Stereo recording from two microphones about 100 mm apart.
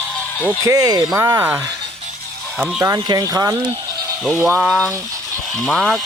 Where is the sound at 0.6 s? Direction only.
35° right (ahead or behind).